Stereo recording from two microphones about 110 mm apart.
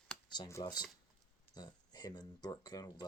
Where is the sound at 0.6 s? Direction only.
40° left (ahead or behind).